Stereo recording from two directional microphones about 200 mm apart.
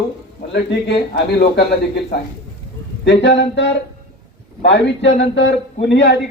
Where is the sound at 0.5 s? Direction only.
55° left (ahead or behind).